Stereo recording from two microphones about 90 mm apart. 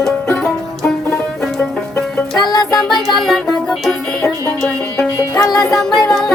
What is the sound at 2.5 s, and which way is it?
Music, 50° left (ahead or behind).